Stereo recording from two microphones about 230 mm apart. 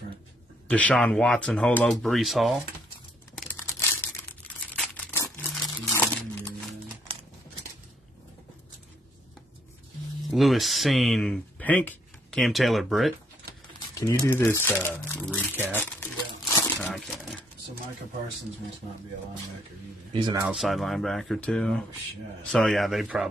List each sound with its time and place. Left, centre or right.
0.7 s speech: centre
3.5 s crumpling: centre
10.3 s speech: centre
13.7 s speech: centre
15.7 s crumpling: centre
16.8 s speech: centre
20.1 s speech: centre
20.4 s speech: centre